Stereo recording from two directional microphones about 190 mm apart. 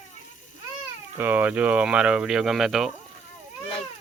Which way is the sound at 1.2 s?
10° right (ahead or behind).